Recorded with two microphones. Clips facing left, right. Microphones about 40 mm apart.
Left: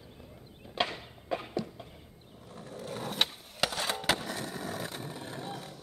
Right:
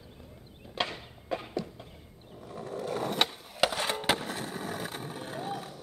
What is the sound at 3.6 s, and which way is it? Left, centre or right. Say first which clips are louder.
Skateboard: right 3 dB; centre.